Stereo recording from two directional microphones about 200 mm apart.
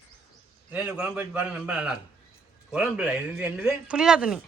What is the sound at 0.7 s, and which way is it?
A man's voice, 5° right (ahead or behind).